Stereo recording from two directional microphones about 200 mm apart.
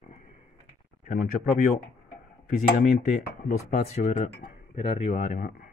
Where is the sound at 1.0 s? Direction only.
40° left (ahead or behind).